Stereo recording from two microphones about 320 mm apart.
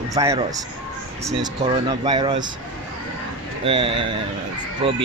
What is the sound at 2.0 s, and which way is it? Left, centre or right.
Speech, centre.